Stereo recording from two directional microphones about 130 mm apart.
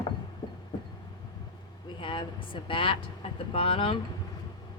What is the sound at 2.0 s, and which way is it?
Speech, 40° left (ahead or behind).